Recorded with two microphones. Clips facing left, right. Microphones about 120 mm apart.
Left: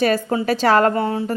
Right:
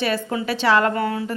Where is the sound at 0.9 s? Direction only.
30° left (ahead or behind).